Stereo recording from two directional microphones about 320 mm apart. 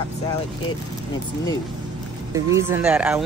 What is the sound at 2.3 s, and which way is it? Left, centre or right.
Speech, centre.